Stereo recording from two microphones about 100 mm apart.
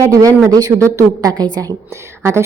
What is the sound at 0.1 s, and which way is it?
A woman's voice, 35° right (ahead or behind).